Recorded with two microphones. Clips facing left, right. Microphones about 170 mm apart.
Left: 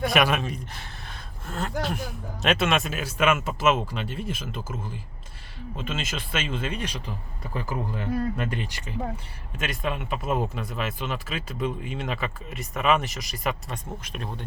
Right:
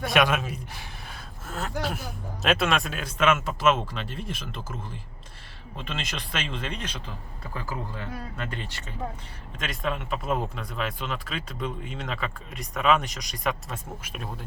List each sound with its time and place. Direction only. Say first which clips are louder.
0.1 s speech: even; centre (ahead or behind)
7.5 s speech: left 4 dB; 20° left (ahead or behind); by 14.3 s 5° right (ahead or behind)